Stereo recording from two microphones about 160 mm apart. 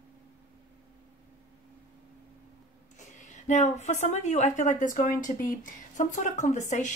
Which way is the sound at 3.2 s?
50° left (ahead or behind).